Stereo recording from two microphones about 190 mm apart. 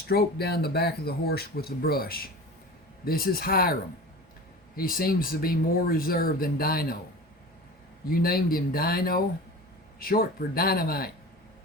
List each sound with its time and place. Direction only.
0.1 s speech: 55° left (ahead or behind)
4.8 s speech: 50° left (ahead or behind)
8.1 s speech: 50° left (ahead or behind)